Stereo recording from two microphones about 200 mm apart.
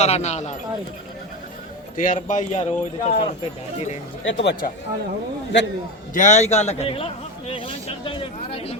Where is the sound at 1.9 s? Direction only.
40° left (ahead or behind).